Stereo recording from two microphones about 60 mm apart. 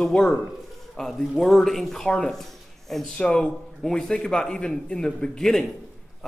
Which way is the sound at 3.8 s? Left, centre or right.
Centre.